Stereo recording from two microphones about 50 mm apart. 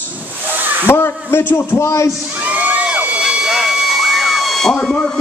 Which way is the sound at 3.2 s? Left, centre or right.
Centre.